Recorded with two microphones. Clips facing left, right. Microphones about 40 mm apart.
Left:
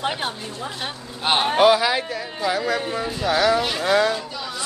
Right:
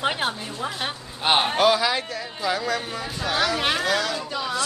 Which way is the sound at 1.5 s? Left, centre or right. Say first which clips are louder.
Left 4 dB; centre.